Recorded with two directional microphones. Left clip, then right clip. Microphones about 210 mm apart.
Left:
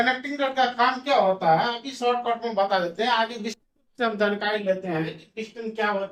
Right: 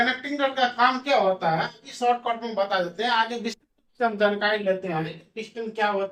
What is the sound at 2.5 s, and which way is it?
Speech, 20° left (ahead or behind).